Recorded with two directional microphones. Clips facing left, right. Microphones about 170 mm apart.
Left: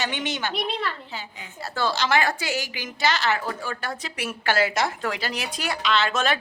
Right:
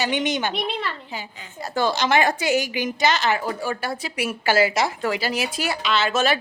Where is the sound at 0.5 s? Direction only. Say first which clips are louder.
Right 1 dB; centre (ahead or behind).